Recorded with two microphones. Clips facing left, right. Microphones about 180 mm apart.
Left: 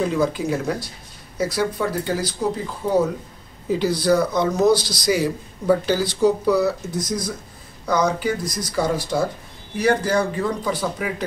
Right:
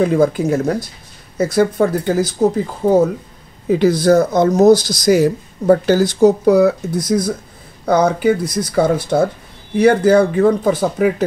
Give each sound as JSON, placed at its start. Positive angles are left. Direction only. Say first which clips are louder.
{"t": 0.0, "sound": "speech", "louder": "right 7 dB", "side_deg": -55}
{"t": 3.6, "sound": "speech", "louder": "right 7 dB", "side_deg": -55}